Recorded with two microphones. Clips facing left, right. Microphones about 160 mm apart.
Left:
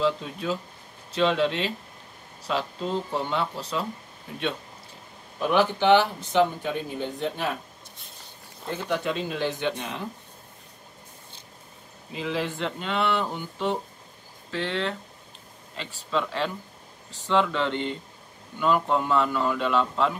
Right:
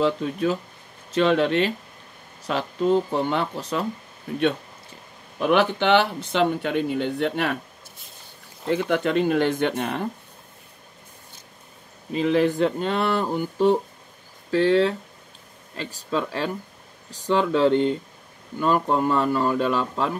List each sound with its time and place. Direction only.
0.0 s speech: 55° right (ahead or behind)
5.4 s speech: 65° right (ahead or behind)
8.6 s speech: 60° right (ahead or behind)
12.3 s speech: 50° right (ahead or behind)
16.1 s speech: 45° right (ahead or behind)